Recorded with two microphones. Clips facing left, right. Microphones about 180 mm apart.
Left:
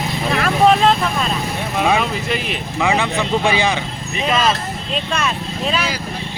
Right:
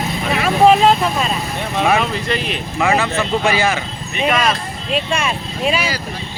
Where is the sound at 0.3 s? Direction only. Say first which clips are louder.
Right 2 dB; 5° right (ahead or behind).